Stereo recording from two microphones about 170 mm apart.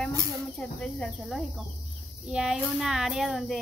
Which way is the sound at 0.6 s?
5° left (ahead or behind).